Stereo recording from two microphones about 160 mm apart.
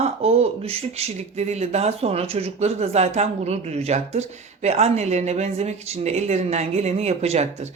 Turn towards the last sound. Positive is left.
turn(degrees=-40)  # may be behind; listen again after turning